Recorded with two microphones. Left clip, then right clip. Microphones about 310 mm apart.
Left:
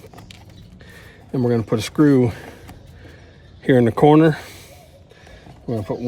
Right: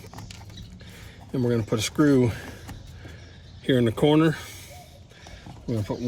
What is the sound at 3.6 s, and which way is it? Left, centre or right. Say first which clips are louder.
Speech: left 8 dB; left.